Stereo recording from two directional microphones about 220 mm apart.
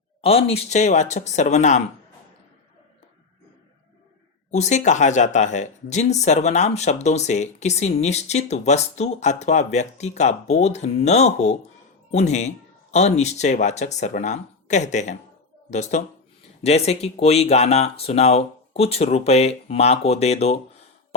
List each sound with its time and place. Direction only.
0.2 s speech: 25° left (ahead or behind)
4.5 s speech: 30° left (ahead or behind)